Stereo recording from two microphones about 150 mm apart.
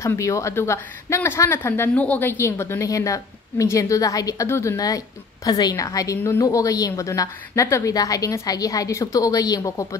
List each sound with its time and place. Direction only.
0.0 s a woman's voice: 20° left (ahead or behind)